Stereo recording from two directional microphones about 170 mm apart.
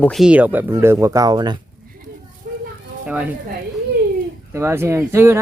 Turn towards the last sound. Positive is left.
turn(degrees=-15)  # may be behind; listen again after turning